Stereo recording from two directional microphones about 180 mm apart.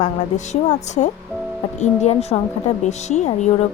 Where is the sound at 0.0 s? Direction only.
40° left (ahead or behind).